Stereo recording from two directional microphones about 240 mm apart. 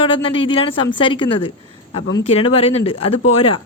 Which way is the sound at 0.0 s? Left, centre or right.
Left.